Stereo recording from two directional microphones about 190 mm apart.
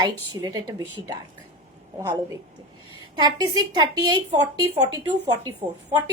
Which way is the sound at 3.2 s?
20° right (ahead or behind).